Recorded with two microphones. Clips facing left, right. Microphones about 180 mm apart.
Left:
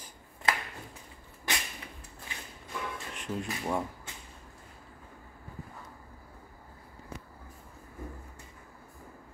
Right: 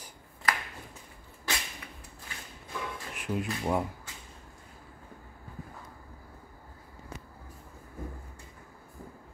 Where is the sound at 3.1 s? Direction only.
5° right (ahead or behind).